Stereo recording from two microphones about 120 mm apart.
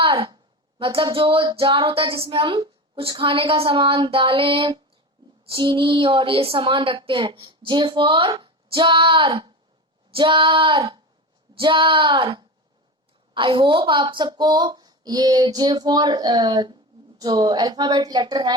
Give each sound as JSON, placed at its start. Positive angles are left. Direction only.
{"t": 0.0, "sound": "a sound", "side_deg": -45}
{"t": 0.8, "sound": "female singing", "side_deg": -45}
{"t": 13.3, "sound": "speech", "side_deg": -45}